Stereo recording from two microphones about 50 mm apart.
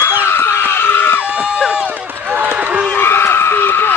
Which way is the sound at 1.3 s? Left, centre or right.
Centre.